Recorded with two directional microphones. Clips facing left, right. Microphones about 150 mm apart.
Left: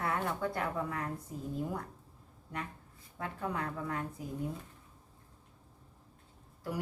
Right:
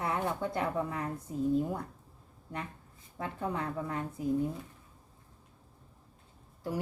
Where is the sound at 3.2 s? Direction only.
25° right (ahead or behind).